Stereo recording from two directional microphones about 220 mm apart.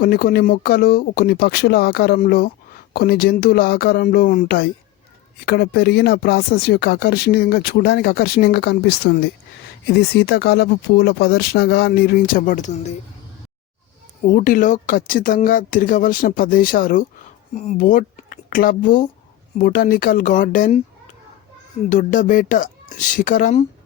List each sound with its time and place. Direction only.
0.0 s speech: 40° left (ahead or behind)
14.3 s speech: 40° left (ahead or behind)
21.8 s speech: 35° left (ahead or behind)